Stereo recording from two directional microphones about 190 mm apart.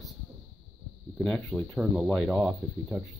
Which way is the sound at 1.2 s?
5° left (ahead or behind).